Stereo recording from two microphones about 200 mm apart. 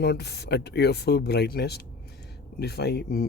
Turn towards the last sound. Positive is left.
turn(degrees=50)  # may be behind; listen again after turning